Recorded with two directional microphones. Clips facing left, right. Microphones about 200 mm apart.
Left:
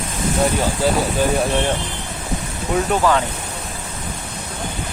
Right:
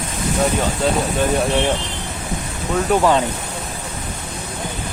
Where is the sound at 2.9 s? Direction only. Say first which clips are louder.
Right 5 dB; 5° right (ahead or behind).